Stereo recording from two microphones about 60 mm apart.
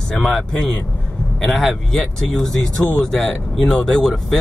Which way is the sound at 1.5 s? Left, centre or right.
Centre.